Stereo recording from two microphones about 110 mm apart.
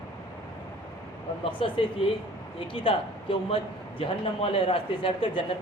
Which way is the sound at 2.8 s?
55° left (ahead or behind).